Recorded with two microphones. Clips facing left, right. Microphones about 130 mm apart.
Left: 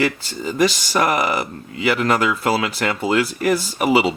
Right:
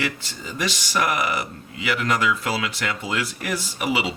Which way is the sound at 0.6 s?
35° left (ahead or behind).